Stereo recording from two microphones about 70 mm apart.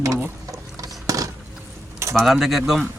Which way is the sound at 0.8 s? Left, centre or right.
Right.